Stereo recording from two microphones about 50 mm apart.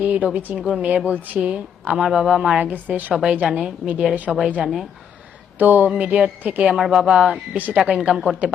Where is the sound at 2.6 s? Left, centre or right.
Right.